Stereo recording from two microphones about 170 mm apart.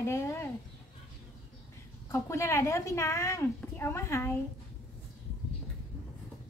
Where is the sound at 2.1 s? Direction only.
15° left (ahead or behind).